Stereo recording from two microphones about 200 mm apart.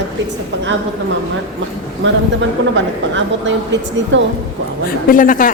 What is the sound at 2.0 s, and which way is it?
A woman's voice, 65° right (ahead or behind).